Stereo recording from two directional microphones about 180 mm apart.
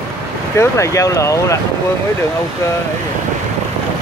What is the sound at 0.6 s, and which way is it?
Speech, 15° left (ahead or behind).